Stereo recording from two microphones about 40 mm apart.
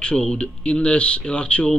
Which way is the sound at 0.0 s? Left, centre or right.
Left.